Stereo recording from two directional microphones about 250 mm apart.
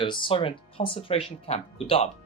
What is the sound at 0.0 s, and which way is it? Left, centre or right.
Speech, centre.